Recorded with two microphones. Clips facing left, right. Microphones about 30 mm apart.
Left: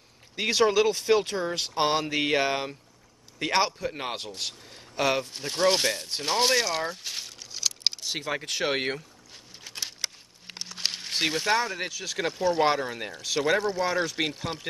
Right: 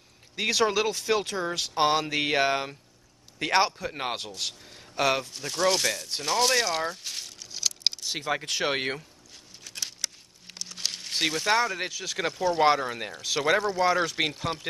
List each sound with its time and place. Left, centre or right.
0.4 s speech: centre
5.2 s speech: centre
6.5 s speech: centre
9.7 s patter: centre
10.9 s a sound: centre
11.6 s speech: centre